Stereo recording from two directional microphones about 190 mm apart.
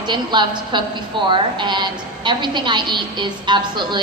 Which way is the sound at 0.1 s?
25° right (ahead or behind).